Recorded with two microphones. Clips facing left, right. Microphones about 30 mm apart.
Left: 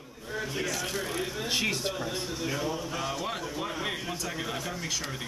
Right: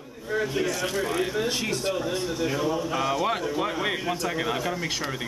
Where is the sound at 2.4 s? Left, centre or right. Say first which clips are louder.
Right 6 dB; centre.